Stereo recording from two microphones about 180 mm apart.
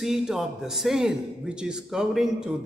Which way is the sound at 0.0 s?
Centre (ahead or behind).